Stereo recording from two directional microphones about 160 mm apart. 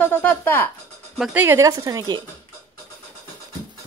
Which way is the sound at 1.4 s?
20° right (ahead or behind).